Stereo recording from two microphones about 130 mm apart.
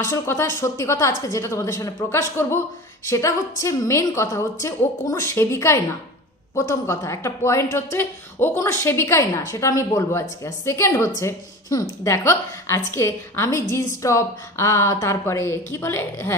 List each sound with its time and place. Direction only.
0.0 s a woman's voice: 20° left (ahead or behind)